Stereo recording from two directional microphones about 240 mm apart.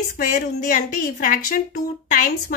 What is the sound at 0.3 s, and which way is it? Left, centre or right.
A woman's voice, left.